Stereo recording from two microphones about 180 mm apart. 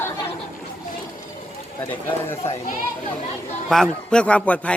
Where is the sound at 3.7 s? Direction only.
5° left (ahead or behind).